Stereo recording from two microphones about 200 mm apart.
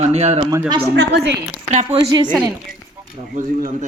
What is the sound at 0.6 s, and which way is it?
Speech, 20° right (ahead or behind).